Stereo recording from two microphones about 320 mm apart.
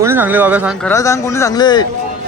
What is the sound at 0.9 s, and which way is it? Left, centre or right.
Speech, centre.